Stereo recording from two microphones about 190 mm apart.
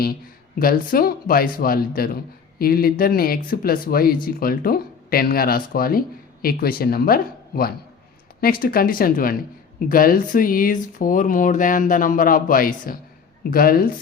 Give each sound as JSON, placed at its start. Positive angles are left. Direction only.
{"t": 0.6, "sound": "speech", "side_deg": 50}